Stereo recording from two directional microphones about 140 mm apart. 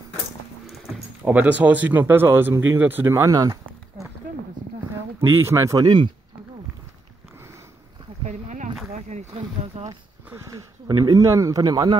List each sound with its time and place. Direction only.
1.2 s speech: 10° right (ahead or behind)
5.4 s speech: 20° right (ahead or behind)
8.3 s a sound: 60° right (ahead or behind)
10.2 s speech: 20° right (ahead or behind)